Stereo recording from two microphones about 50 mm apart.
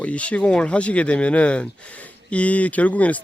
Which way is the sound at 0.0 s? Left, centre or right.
Left.